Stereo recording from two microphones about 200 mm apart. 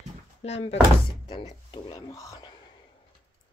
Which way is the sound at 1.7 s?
20° left (ahead or behind).